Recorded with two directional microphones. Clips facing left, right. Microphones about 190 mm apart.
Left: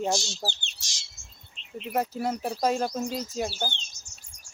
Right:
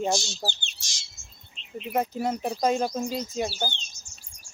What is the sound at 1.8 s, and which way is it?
Speech, centre (ahead or behind).